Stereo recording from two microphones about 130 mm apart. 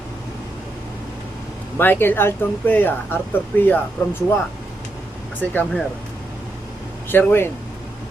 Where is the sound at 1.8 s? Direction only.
15° left (ahead or behind).